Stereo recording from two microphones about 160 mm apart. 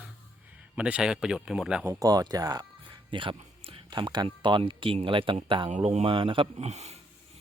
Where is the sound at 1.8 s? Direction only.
20° right (ahead or behind); by 7.0 s 45° right (ahead or behind).